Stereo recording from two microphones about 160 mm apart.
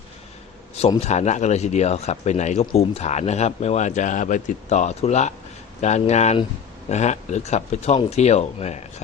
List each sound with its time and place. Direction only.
0.8 s speech: 40° left (ahead or behind)